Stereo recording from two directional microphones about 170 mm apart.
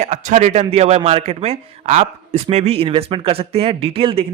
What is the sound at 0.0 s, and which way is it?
Speech, 45° right (ahead or behind).